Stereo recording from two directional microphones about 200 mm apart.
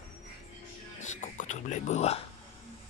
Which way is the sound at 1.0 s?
35° left (ahead or behind).